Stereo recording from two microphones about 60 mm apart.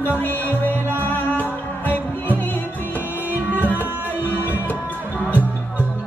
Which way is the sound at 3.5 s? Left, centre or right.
Right.